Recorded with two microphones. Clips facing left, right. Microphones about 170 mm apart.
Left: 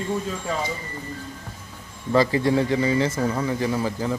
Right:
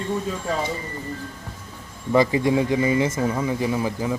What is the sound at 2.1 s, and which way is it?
Speech, 15° right (ahead or behind).